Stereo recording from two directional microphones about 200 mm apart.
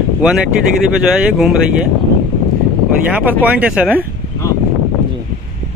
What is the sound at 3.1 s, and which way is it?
Speech, 10° right (ahead or behind).